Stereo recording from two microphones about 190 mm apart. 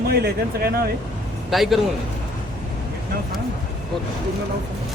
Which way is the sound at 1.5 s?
Centre (ahead or behind).